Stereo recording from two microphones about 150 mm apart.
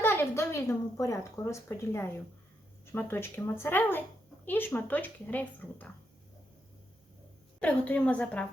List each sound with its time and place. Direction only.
0.0 s a woman's voice: 15° left (ahead or behind)
7.6 s a woman's voice: 10° left (ahead or behind)